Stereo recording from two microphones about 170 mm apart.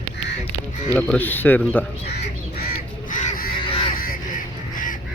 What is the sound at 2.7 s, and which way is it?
Crow, 55° left (ahead or behind).